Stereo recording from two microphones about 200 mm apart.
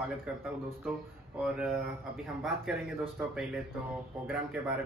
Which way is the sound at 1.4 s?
5° right (ahead or behind).